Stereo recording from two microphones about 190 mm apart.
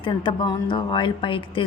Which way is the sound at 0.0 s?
25° left (ahead or behind).